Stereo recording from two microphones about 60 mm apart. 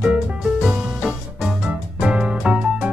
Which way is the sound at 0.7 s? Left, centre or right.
Centre.